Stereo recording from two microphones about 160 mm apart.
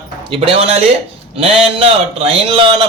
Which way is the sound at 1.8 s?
35° right (ahead or behind).